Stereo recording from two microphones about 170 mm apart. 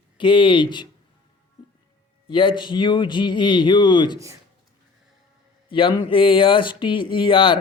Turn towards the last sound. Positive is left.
turn(degrees=30)  # may be behind; listen again after turning